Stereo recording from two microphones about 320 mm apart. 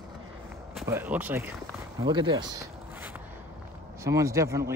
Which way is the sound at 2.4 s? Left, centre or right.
Centre.